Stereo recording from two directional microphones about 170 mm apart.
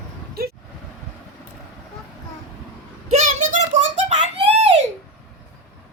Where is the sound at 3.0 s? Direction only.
45° right (ahead or behind).